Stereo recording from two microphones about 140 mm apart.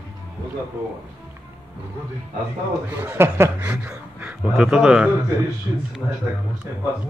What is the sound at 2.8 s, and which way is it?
A man's voice, 15° right (ahead or behind).